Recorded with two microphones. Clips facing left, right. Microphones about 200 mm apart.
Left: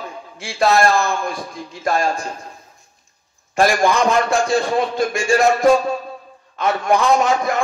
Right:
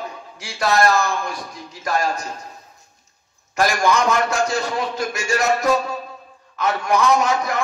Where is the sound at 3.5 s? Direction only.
30° left (ahead or behind).